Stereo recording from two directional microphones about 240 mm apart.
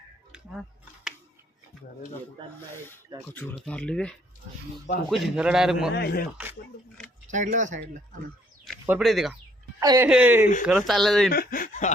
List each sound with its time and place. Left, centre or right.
0.3 s a sound: centre
3.2 s speech: centre
5.9 s speech: left
6.3 s speech: centre
7.3 s speech: right
8.6 s speech: centre
9.8 s speech: centre
11.3 s speech: left